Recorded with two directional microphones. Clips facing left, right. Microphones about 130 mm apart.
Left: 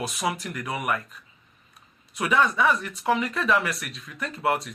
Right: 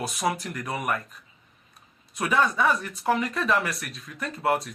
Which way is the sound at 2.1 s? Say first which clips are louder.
Left 1 dB; 35° right (ahead or behind).